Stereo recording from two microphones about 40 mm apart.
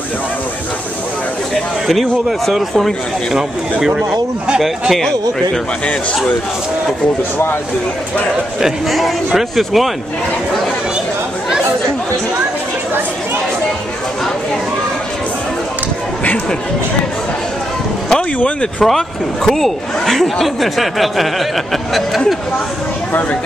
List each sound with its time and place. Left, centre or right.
1.9 s speech: centre
8.5 s speech: centre
18.1 s a sound: left
18.9 s speech: centre